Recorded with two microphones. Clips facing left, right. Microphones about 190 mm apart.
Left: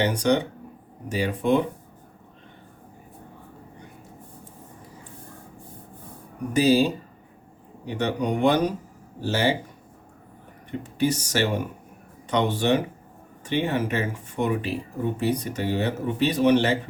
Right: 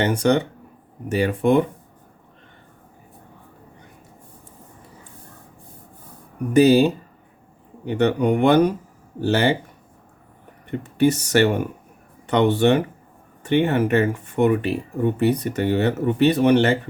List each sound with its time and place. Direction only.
0.0 s speech: 55° right (ahead or behind)
6.5 s speech: 60° right (ahead or behind)
10.7 s speech: 60° right (ahead or behind)